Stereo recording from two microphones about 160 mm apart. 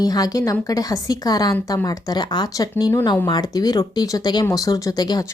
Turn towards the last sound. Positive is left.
turn(degrees=25)  # may be behind; listen again after turning